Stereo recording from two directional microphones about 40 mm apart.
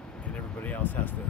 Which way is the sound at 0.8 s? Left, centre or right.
Left.